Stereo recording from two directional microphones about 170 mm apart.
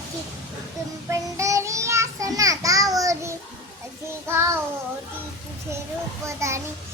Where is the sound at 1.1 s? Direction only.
15° right (ahead or behind).